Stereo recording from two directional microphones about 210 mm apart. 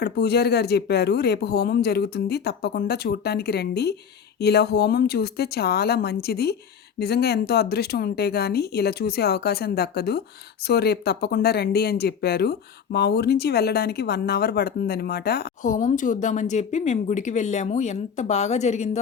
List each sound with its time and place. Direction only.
0.0 s speech: 50° left (ahead or behind); by 18.9 s 30° left (ahead or behind)